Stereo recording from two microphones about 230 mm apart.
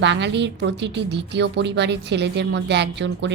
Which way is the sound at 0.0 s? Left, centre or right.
Right.